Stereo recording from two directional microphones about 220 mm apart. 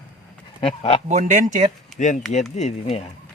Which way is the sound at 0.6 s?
25° left (ahead or behind).